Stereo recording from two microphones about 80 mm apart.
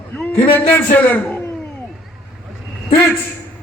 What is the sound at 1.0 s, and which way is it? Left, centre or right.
Speech, left.